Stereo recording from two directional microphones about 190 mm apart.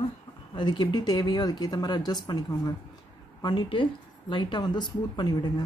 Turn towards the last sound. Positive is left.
turn(degrees=20)  # may be behind; listen again after turning